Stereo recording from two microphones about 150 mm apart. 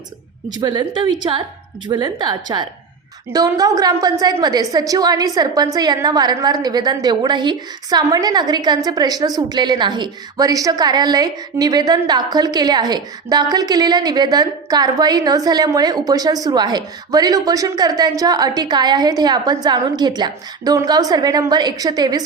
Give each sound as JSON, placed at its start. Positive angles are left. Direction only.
{"t": 0.5, "sound": "a woman's voice", "side_deg": -30}